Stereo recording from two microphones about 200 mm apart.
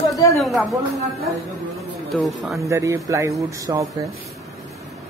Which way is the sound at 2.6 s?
15° right (ahead or behind).